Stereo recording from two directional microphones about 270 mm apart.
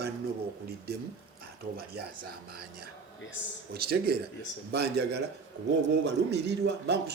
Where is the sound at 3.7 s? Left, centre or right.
Right.